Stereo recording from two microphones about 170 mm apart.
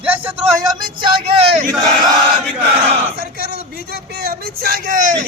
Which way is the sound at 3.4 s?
65° right (ahead or behind).